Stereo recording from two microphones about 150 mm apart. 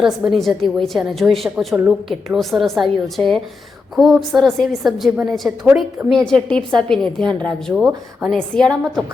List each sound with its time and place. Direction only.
0.0 s a woman's voice: centre (ahead or behind)
6.6 s a woman's voice: 30° right (ahead or behind)
6.8 s a woman's voice: 5° left (ahead or behind)
7.8 s speech: 5° right (ahead or behind)
8.4 s a woman's voice: 5° left (ahead or behind)